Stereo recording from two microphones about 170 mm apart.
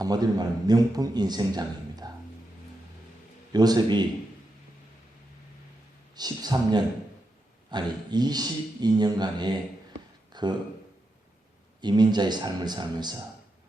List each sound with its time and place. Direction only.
0.0 s a man's voice: 25° right (ahead or behind)
3.5 s a man's voice: 25° right (ahead or behind)
6.1 s a man's voice: 25° right (ahead or behind)
11.8 s a man's voice: 25° right (ahead or behind)